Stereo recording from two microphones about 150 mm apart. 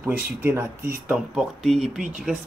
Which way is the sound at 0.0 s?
15° right (ahead or behind).